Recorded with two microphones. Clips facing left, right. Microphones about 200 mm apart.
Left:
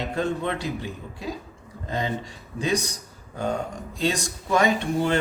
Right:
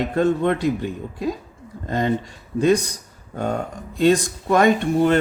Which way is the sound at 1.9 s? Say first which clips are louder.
Right 7 dB; 55° right (ahead or behind).